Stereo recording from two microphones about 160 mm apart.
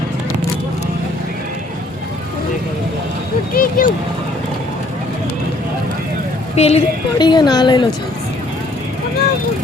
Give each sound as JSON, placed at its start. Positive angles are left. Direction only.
{"t": 3.5, "sound": "vehicle", "side_deg": 60}
{"t": 6.6, "sound": "speech", "side_deg": 40}
{"t": 7.2, "sound": "a woman's voice", "side_deg": 25}